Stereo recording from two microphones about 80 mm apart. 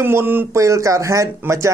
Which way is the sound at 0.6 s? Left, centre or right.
Right.